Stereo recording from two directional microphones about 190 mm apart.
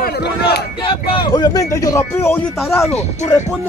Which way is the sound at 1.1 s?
25° left (ahead or behind).